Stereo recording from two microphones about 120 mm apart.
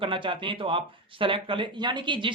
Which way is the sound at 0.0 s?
45° right (ahead or behind).